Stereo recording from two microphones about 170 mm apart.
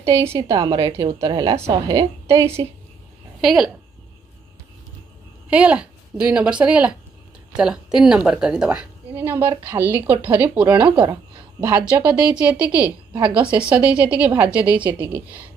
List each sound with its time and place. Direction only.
0.1 s a woman's voice: 20° right (ahead or behind)
3.3 s speech: centre (ahead or behind)
5.5 s a woman's voice: 5° right (ahead or behind)
12.0 s a woman's voice: 5° right (ahead or behind)